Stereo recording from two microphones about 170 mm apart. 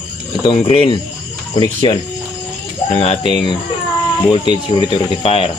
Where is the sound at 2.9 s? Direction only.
35° left (ahead or behind).